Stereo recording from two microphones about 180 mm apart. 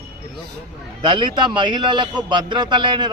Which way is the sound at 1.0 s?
25° right (ahead or behind).